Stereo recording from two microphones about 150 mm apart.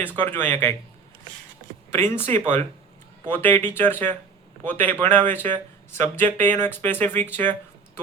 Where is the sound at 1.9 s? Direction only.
15° left (ahead or behind).